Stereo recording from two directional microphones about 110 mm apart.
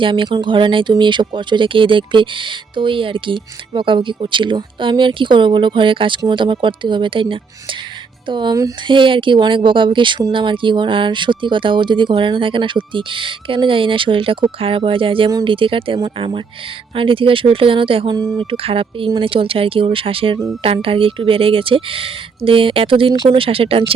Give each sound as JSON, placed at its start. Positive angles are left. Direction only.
{"t": 0.0, "sound": "speech", "side_deg": -50}
{"t": 18.1, "sound": "speech", "side_deg": -40}
{"t": 18.5, "sound": "speech", "side_deg": -55}
{"t": 23.1, "sound": "speech", "side_deg": -45}